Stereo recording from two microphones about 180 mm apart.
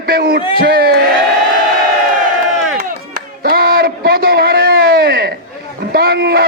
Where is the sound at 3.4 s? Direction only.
55° right (ahead or behind).